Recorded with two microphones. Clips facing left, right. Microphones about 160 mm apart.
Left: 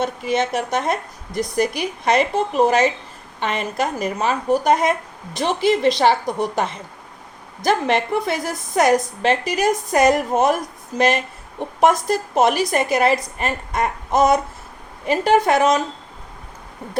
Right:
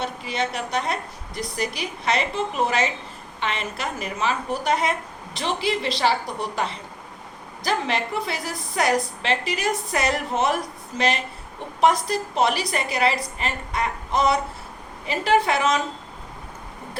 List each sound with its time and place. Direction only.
0.0 s speech: 50° left (ahead or behind)